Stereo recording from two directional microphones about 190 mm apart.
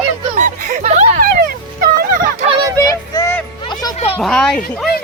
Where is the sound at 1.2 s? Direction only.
50° right (ahead or behind).